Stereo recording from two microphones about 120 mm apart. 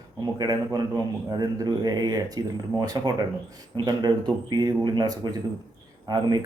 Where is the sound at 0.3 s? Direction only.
35° right (ahead or behind).